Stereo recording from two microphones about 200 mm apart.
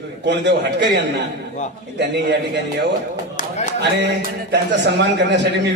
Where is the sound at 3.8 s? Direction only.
60° right (ahead or behind).